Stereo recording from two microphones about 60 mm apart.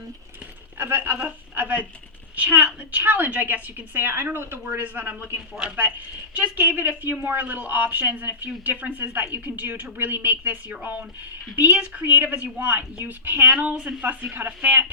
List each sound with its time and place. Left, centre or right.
0.8 s a woman's voice: right
5.6 s speech: centre
6.3 s a woman's voice: right